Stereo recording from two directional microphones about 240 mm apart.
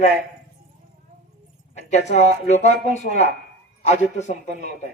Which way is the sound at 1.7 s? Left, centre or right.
Left.